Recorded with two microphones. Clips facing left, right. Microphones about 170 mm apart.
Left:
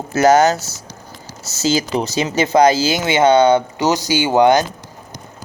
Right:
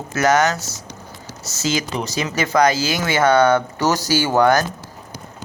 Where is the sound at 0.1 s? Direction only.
30° left (ahead or behind).